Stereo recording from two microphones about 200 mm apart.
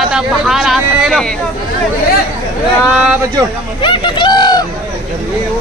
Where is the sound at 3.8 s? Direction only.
25° left (ahead or behind).